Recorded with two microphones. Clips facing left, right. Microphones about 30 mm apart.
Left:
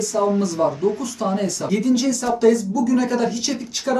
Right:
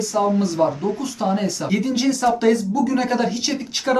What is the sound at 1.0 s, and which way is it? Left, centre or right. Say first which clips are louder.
Speech: right 1 dB; centre.